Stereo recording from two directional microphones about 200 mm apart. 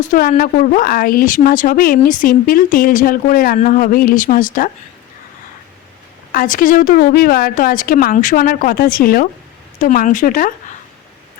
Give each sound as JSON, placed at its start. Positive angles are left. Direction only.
{"t": 0.0, "sound": "a woman's voice", "side_deg": 40}
{"t": 6.3, "sound": "a woman's voice", "side_deg": 45}